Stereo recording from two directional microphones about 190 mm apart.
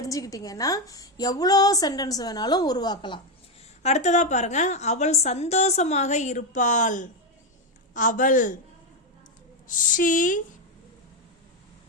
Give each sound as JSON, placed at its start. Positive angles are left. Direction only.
{"t": 0.0, "sound": "a woman's voice", "side_deg": 20}
{"t": 3.8, "sound": "a woman's voice", "side_deg": 35}
{"t": 9.6, "sound": "speech", "side_deg": 45}